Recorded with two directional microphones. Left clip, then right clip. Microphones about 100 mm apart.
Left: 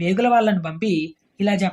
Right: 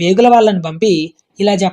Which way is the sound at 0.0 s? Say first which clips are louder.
Right 9 dB; 15° right (ahead or behind).